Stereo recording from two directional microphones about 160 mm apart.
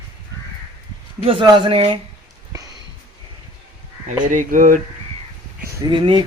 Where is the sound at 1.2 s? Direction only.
30° right (ahead or behind).